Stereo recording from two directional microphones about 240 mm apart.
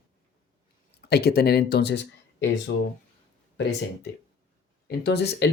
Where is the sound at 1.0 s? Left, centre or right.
Left.